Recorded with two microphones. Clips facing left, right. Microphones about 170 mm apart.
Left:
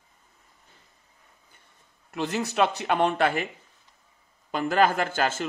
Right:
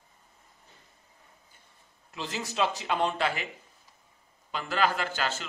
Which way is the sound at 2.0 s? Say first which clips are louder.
Left 8 dB; 60° left (ahead or behind).